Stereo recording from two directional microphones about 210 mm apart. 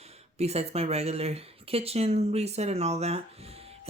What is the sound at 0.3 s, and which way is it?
Speech, 30° right (ahead or behind).